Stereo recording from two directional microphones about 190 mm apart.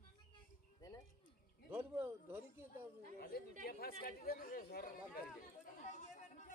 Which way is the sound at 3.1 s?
50° left (ahead or behind).